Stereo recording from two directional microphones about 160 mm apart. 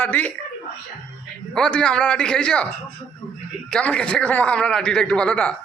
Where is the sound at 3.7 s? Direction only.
5° left (ahead or behind).